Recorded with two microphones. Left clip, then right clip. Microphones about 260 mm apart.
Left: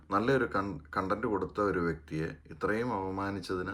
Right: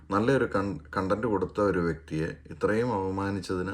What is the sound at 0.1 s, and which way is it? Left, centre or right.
Speech, centre.